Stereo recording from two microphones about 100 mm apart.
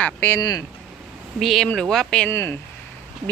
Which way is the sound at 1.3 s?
Centre (ahead or behind).